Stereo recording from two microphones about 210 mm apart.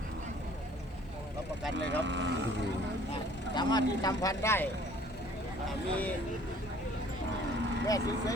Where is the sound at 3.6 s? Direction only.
20° left (ahead or behind).